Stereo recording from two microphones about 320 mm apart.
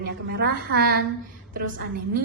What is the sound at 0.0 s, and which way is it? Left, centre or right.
Speech, right.